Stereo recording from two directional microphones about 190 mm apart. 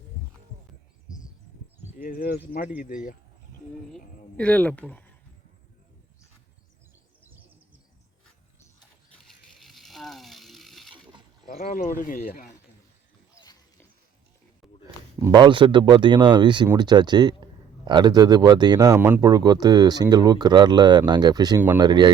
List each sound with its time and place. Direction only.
2.0 s speech: 50° left (ahead or behind)
4.4 s speech: 5° left (ahead or behind)
9.1 s a sound: centre (ahead or behind)
11.4 s speech: 45° left (ahead or behind)
14.6 s a sound: centre (ahead or behind)
15.2 s speech: 25° right (ahead or behind)